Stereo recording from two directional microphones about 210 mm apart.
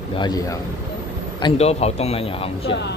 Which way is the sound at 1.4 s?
30° left (ahead or behind).